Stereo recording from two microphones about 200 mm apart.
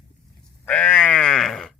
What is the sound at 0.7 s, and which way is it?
Sheep, 5° left (ahead or behind).